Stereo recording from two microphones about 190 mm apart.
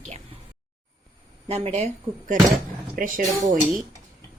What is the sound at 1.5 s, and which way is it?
Speech, 35° right (ahead or behind).